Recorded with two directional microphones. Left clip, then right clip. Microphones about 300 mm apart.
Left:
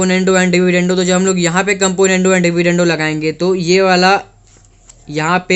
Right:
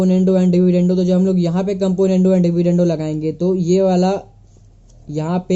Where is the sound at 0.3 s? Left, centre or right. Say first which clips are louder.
Left 4 dB; centre.